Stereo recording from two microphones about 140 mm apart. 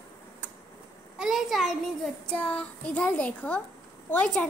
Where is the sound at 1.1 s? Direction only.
Centre (ahead or behind).